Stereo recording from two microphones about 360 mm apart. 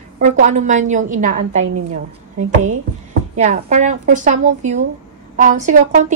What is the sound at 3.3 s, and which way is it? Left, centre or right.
A woman's voice, centre.